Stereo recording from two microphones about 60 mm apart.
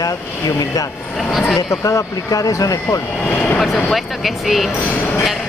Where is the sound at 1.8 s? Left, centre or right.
Left.